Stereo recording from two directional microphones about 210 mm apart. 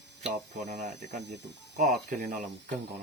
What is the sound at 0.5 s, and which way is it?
Speech, 35° right (ahead or behind).